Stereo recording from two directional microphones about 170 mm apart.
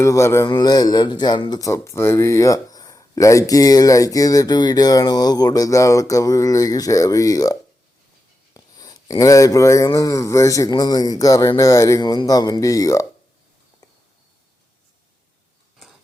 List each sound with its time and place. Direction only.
0.0 s speech: 15° left (ahead or behind)
8.5 s speech: 20° left (ahead or behind)